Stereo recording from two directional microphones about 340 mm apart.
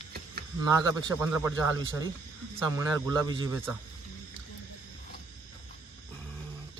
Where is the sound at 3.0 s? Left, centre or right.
Centre.